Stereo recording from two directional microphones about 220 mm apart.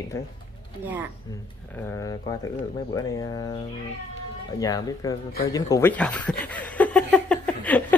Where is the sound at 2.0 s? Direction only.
15° left (ahead or behind).